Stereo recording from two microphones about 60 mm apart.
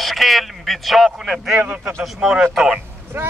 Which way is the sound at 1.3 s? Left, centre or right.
Centre.